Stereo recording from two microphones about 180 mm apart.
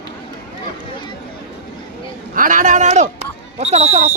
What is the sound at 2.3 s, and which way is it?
Speech, 45° right (ahead or behind).